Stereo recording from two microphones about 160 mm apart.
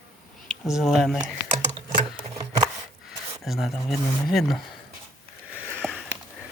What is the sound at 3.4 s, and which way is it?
Speech, centre (ahead or behind).